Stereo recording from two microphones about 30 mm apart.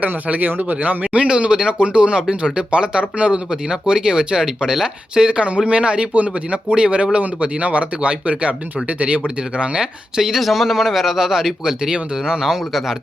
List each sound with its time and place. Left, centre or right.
0.3 s speech: right
1.3 s speech: right
6.1 s speech: right
6.5 s speech: right
9.8 s speech: centre
10.3 s speech: centre